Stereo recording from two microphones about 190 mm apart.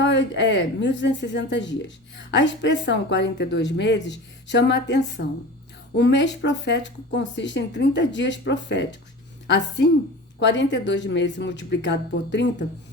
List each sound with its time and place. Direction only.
0.0 s a woman's voice: 70° left (ahead or behind)